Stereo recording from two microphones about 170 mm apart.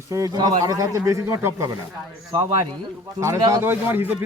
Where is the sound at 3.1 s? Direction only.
20° right (ahead or behind).